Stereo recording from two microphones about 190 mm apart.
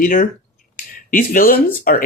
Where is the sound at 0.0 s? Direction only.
45° left (ahead or behind).